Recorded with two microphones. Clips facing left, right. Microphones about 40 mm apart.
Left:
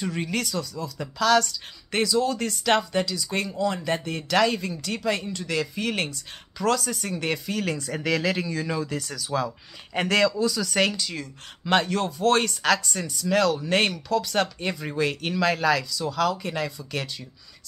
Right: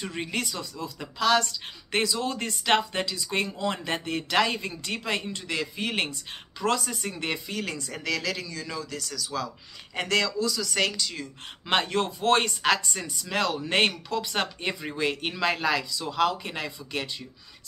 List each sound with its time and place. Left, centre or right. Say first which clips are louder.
0.0 s a woman's voice: left 3 dB; centre
7.6 s speech: left 5 dB; centre
8.0 s speech: left 5 dB; centre
9.9 s speech: left 4 dB; centre
11.6 s speech: left 2 dB; right